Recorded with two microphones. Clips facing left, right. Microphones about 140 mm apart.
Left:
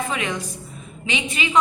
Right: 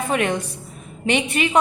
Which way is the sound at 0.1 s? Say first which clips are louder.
Right 5 dB; 55° right (ahead or behind).